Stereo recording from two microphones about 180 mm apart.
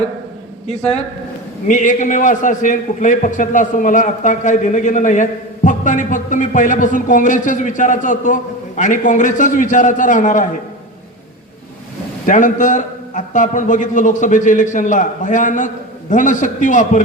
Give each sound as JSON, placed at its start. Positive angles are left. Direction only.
{"t": 1.6, "sound": "a man's voice", "side_deg": 45}
{"t": 12.2, "sound": "a man's voice", "side_deg": 45}